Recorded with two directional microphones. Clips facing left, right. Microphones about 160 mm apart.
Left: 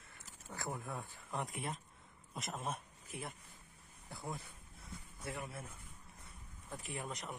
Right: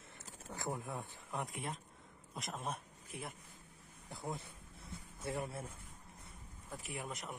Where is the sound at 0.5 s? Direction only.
20° right (ahead or behind).